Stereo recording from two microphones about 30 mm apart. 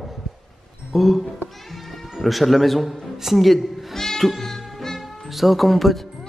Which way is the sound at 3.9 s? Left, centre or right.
Centre.